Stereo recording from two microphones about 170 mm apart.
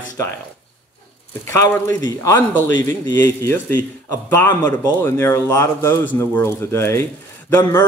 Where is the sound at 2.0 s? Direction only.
20° left (ahead or behind).